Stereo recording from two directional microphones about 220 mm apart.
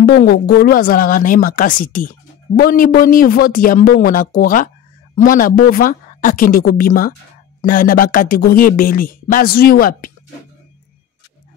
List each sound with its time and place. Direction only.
0.0 s speech: 45° left (ahead or behind)